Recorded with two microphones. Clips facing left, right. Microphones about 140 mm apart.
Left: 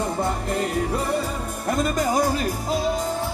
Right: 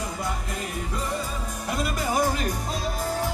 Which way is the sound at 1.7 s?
45° left (ahead or behind).